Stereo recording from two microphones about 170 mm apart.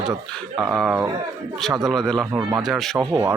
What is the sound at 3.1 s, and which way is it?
Speech, 15° right (ahead or behind).